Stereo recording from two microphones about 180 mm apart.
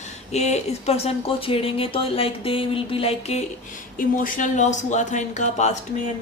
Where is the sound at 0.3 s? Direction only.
35° left (ahead or behind).